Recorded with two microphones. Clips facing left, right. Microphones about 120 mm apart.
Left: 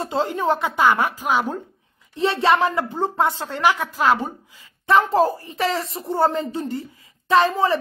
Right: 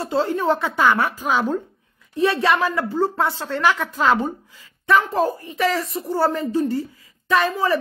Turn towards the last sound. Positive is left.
turn(degrees=25)  # may be behind; listen again after turning